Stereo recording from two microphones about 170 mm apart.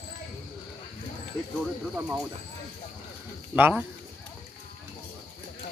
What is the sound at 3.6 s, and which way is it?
Speech, 10° right (ahead or behind).